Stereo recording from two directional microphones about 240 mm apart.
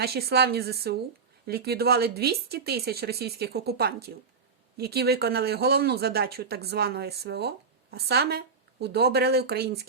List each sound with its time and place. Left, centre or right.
0.0 s speech: right